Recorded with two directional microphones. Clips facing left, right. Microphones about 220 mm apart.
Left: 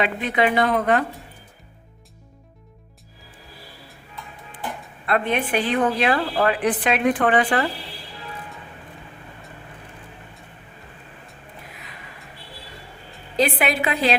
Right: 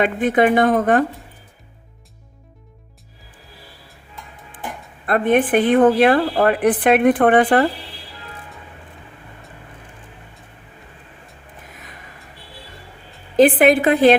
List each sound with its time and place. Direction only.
0.0 s a woman's voice: 50° right (ahead or behind)
5.0 s a woman's voice: 45° right (ahead or behind)
11.7 s a sound: 45° right (ahead or behind)
13.3 s a woman's voice: 50° right (ahead or behind)